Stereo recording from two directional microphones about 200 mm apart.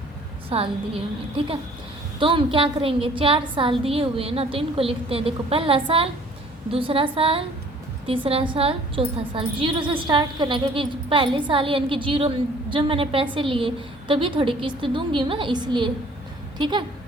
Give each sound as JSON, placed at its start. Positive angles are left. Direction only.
{"t": 0.5, "sound": "a woman's voice", "side_deg": -30}
{"t": 2.1, "sound": "a woman's voice", "side_deg": -25}